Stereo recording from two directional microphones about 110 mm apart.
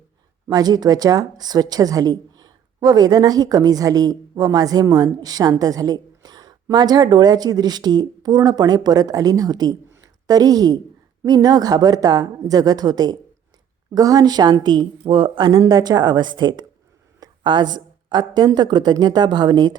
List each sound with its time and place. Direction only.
0.4 s a woman's voice: 35° right (ahead or behind)